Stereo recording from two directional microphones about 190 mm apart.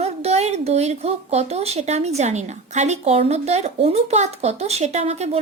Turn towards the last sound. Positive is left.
turn(degrees=-35)  # may be behind; listen again after turning